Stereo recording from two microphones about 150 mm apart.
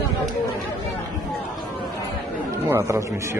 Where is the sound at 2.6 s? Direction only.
20° right (ahead or behind).